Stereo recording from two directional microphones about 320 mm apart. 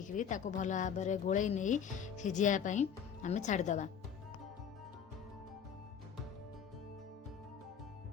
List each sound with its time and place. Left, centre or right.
0.0 s a woman's voice: left